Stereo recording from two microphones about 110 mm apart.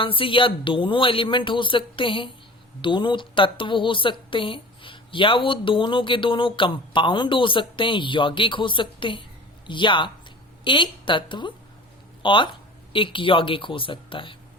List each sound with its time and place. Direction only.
0.0 s a woman's voice: 50° left (ahead or behind)